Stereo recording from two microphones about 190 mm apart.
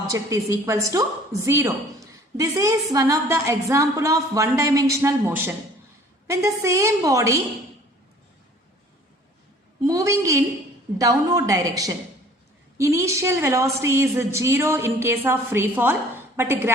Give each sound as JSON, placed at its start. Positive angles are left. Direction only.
{"t": 0.1, "sound": "a woman's voice", "side_deg": -15}
{"t": 9.8, "sound": "a sound", "side_deg": -15}
{"t": 10.9, "sound": "a woman's voice", "side_deg": -20}